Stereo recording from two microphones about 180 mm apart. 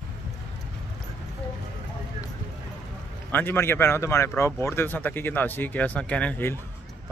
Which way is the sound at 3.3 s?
10° left (ahead or behind).